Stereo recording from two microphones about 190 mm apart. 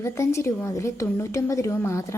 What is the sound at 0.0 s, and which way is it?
A woman's voice, 15° left (ahead or behind).